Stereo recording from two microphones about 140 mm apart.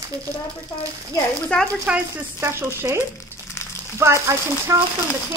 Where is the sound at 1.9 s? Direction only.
10° right (ahead or behind).